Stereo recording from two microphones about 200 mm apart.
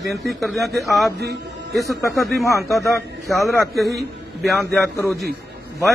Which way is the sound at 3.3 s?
Centre (ahead or behind).